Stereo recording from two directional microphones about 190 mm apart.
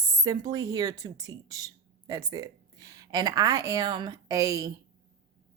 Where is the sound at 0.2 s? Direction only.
20° right (ahead or behind).